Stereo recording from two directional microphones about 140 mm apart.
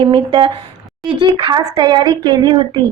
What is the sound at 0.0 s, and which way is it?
A woman's voice, 35° right (ahead or behind).